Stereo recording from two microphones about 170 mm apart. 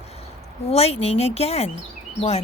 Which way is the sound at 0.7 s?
35° left (ahead or behind).